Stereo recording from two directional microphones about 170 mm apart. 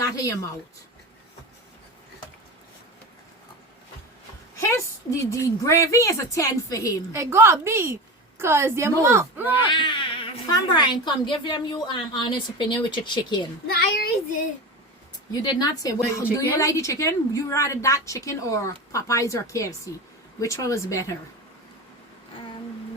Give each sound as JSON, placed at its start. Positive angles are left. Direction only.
{"t": 0.0, "sound": "a woman's voice", "side_deg": 20}
{"t": 5.2, "sound": "speech", "side_deg": 20}
{"t": 7.1, "sound": "speech", "side_deg": -15}
{"t": 9.6, "sound": "speech", "side_deg": 30}
{"t": 13.7, "sound": "speech", "side_deg": 60}
{"t": 15.3, "sound": "speech", "side_deg": 25}